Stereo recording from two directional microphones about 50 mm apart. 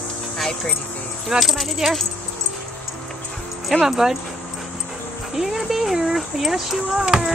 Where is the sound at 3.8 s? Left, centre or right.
Centre.